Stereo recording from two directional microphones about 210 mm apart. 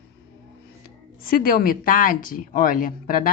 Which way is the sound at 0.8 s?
45° left (ahead or behind).